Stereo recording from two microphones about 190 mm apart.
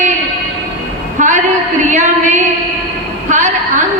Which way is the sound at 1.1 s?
40° right (ahead or behind).